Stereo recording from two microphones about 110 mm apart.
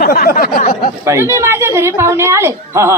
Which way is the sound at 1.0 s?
25° right (ahead or behind).